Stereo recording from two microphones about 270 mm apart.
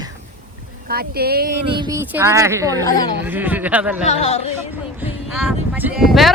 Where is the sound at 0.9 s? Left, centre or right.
Right.